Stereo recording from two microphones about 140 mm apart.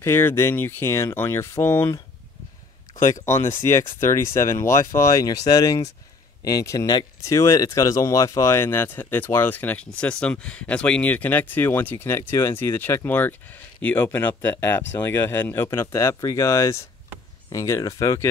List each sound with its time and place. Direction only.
0.0 s speech: 15° left (ahead or behind)
3.3 s speech: 20° left (ahead or behind)